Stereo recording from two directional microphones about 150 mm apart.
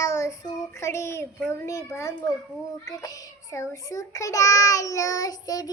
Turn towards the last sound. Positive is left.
turn(degrees=25)  # may be behind; listen again after turning